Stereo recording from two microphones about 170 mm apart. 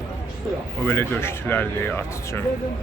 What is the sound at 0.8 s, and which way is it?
Speech, 15° left (ahead or behind).